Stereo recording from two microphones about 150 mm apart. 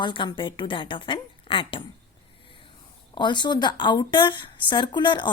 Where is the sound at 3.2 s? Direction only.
30° left (ahead or behind).